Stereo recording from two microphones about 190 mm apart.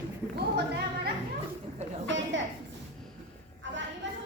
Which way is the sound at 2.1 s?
75° right (ahead or behind).